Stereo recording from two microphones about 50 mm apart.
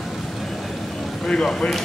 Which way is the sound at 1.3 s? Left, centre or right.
Centre.